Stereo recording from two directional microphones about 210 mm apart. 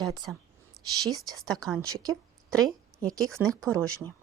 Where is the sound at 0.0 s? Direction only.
20° right (ahead or behind).